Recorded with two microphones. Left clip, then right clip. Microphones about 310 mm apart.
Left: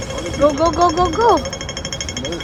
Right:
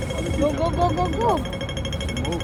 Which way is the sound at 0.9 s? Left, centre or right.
Left.